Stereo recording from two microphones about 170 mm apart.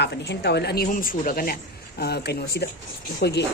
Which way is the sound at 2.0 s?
70° left (ahead or behind).